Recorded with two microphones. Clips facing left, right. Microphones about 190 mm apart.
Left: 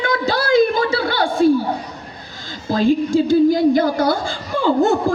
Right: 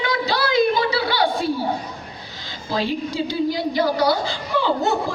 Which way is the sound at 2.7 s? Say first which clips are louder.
Left 8 dB; 45° left (ahead or behind).